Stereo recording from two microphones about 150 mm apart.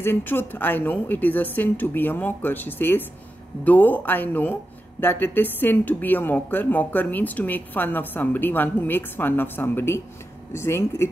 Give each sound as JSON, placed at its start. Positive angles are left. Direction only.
{"t": 0.0, "sound": "a woman's voice", "side_deg": 15}